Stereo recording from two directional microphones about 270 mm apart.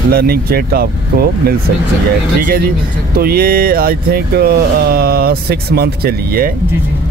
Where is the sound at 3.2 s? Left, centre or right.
Right.